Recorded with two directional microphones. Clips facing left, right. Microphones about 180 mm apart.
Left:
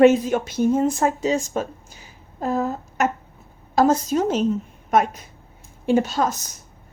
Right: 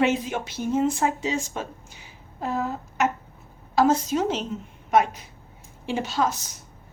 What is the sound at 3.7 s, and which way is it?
Speech, 45° left (ahead or behind).